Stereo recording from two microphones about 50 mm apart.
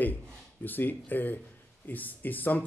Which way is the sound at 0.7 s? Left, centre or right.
Left.